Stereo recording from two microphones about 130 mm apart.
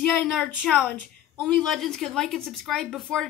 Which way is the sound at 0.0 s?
5° left (ahead or behind).